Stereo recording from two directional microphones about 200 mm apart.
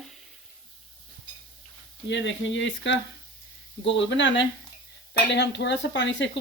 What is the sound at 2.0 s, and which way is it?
Speech, 65° left (ahead or behind).